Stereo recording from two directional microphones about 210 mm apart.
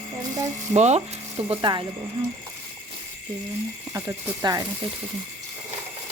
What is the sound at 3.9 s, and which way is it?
Speech, 15° right (ahead or behind).